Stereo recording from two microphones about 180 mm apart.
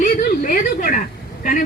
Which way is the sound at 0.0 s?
45° left (ahead or behind).